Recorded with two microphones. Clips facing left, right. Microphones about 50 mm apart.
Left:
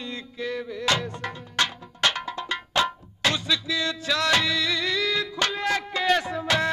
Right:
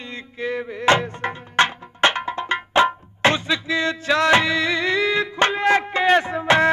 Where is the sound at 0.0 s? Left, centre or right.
Right.